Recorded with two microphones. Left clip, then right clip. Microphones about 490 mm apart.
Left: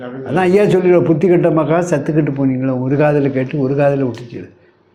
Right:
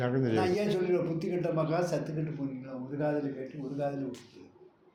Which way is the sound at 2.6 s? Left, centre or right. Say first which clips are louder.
Left 19 dB; left.